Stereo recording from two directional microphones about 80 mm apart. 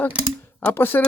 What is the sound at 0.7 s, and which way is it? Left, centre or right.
Speech, left.